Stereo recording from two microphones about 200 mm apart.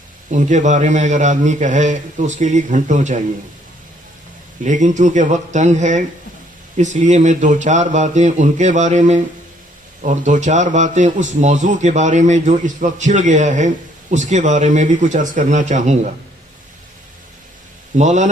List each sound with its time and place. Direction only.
0.3 s a man's voice: 40° right (ahead or behind)
4.6 s a man's voice: 40° right (ahead or behind)
17.9 s a man's voice: 35° right (ahead or behind)